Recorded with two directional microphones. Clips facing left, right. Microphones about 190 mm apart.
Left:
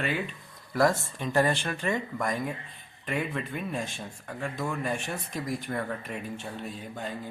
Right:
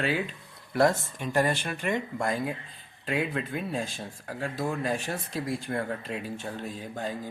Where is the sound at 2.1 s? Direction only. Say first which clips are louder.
Right 1 dB; 30° right (ahead or behind).